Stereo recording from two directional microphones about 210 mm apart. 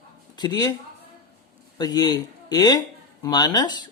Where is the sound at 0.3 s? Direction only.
20° left (ahead or behind).